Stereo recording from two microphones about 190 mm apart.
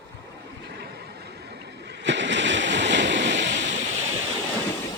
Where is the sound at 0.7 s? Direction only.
60° right (ahead or behind).